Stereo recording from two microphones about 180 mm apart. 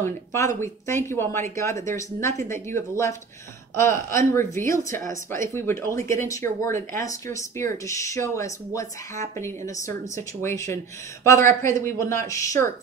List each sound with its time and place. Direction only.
0.0 s speech: 15° left (ahead or behind)